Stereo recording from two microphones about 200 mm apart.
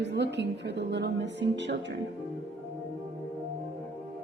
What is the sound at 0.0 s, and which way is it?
Speech, 60° right (ahead or behind).